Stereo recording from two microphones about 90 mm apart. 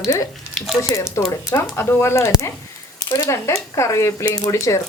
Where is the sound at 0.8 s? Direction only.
35° left (ahead or behind).